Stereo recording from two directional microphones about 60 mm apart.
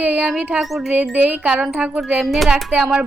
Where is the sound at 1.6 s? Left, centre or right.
Centre.